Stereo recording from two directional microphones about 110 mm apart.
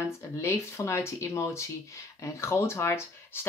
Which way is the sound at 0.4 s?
25° left (ahead or behind).